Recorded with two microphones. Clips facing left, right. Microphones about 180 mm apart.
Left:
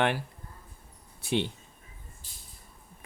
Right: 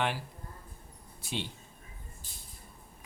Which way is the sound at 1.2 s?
60° left (ahead or behind).